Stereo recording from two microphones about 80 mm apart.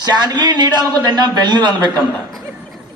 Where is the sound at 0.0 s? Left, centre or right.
Right.